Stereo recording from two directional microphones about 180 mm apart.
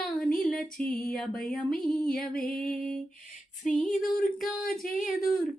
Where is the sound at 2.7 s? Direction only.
45° left (ahead or behind).